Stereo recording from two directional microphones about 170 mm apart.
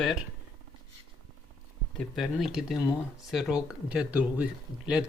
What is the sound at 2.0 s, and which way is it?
Speech, 5° left (ahead or behind).